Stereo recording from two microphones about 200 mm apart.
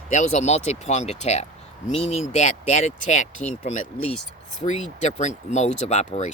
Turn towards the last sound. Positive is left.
turn(degrees=35)  # may be behind; listen again after turning